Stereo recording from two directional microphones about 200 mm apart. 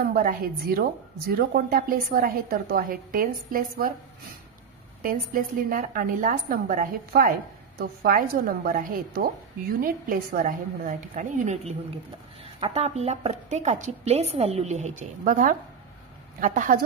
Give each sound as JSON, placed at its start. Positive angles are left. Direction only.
{"t": 0.0, "sound": "a woman's voice", "side_deg": -45}
{"t": 5.0, "sound": "a woman's voice", "side_deg": -45}